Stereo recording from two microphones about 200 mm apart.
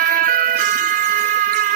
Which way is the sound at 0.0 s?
45° right (ahead or behind).